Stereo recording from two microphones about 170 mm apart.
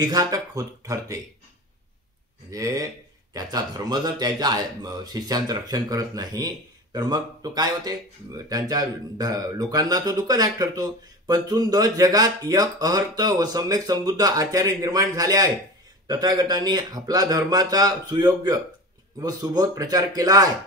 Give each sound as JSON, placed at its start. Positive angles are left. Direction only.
{"t": 0.0, "sound": "speech", "side_deg": -25}
{"t": 2.5, "sound": "speech", "side_deg": -20}